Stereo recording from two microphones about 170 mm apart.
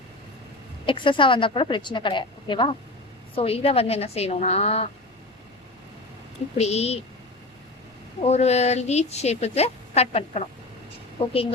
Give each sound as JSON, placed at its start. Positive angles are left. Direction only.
{"t": 0.9, "sound": "a woman's voice", "side_deg": 30}
{"t": 6.6, "sound": "speech", "side_deg": 40}
{"t": 8.2, "sound": "speech", "side_deg": 40}